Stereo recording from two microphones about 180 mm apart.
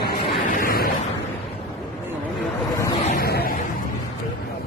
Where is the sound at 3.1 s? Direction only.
60° left (ahead or behind).